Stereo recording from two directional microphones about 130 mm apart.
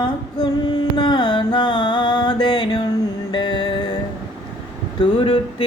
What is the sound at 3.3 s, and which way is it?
Music, 35° left (ahead or behind).